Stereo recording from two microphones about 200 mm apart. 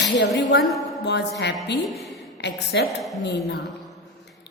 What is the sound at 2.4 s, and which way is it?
A woman's voice, 55° left (ahead or behind).